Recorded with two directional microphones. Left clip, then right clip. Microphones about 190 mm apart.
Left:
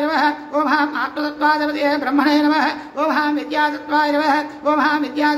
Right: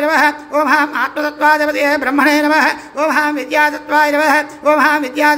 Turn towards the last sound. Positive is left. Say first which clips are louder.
# right 5 dB
turn(degrees=-15)  # may be behind; listen again after turning